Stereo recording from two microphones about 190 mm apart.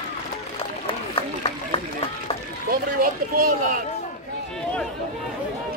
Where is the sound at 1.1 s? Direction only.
30° left (ahead or behind).